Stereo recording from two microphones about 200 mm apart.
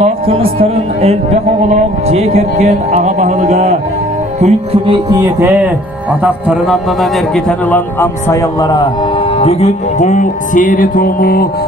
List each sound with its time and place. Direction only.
0.0 s speech: 30° right (ahead or behind)
4.4 s music: 30° right (ahead or behind)
5.4 s a man's voice: 10° right (ahead or behind); by 8.8 s 20° left (ahead or behind)
9.4 s music: 30° left (ahead or behind); by 11.4 s 50° left (ahead or behind)